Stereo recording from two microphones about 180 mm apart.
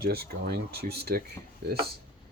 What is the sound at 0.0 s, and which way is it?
Speech, 60° right (ahead or behind).